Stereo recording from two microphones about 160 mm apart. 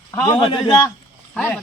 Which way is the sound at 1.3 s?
10° left (ahead or behind).